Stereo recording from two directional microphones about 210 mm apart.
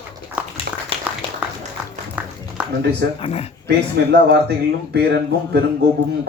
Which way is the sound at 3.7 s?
50° right (ahead or behind).